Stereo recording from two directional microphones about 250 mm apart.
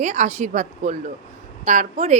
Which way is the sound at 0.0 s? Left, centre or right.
Right.